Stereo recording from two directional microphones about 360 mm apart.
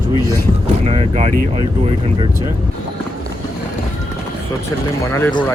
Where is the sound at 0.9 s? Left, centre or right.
Centre.